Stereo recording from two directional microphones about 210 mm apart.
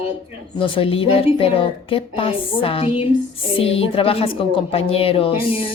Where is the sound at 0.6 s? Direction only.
25° left (ahead or behind).